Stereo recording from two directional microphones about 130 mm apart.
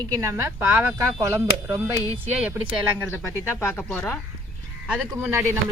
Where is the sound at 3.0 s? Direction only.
15° left (ahead or behind).